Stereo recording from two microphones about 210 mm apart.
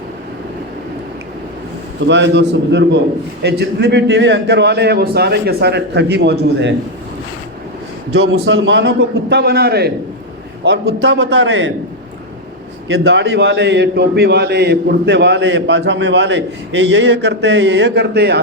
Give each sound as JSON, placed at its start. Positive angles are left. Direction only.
{"t": 2.0, "sound": "a man's voice", "side_deg": -60}
{"t": 8.2, "sound": "a man's voice", "side_deg": -65}
{"t": 12.9, "sound": "a man's voice", "side_deg": -60}